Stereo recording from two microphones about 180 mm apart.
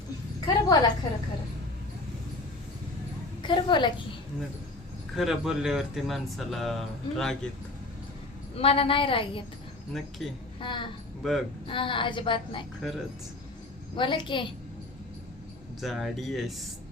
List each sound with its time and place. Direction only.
0.4 s a sound: 20° left (ahead or behind)
3.4 s a woman's voice: 25° left (ahead or behind)
5.1 s speech: 5° right (ahead or behind)
8.5 s a woman's voice: 30° left (ahead or behind)
9.9 s speech: centre (ahead or behind)
10.6 s a woman's voice: 25° left (ahead or behind)
11.2 s speech: centre (ahead or behind)
11.7 s a woman's voice: 30° left (ahead or behind)
13.9 s a woman's voice: 25° left (ahead or behind)
15.8 s speech: centre (ahead or behind)